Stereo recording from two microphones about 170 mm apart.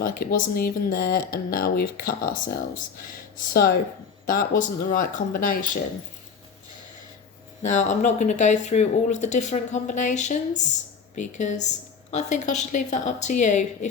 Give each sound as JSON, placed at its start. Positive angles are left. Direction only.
{"t": 0.0, "sound": "speech", "side_deg": 60}
{"t": 3.5, "sound": "speech", "side_deg": 65}
{"t": 7.6, "sound": "speech", "side_deg": 45}